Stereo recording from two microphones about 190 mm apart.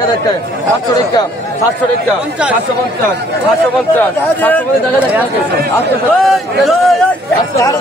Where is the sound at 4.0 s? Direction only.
10° left (ahead or behind).